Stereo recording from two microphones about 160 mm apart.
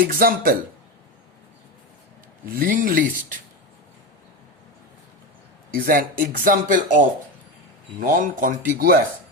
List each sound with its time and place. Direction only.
0.1 s speech: 65° right (ahead or behind)
2.5 s speech: 60° right (ahead or behind)
5.7 s speech: 60° right (ahead or behind)